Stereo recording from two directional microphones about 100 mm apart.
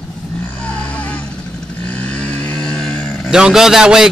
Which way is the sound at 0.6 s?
10° left (ahead or behind).